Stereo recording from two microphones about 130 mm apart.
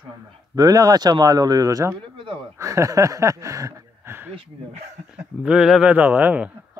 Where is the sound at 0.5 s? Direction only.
30° right (ahead or behind).